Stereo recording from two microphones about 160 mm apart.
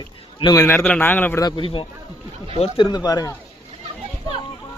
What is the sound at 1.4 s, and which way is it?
Speech, 30° left (ahead or behind).